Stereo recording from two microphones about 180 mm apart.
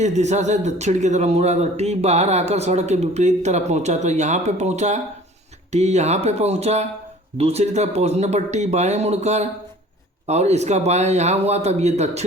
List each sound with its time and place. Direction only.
0.0 s a man's voice: 40° right (ahead or behind)